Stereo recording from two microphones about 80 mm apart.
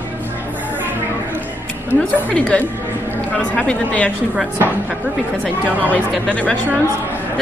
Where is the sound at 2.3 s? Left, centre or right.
Centre.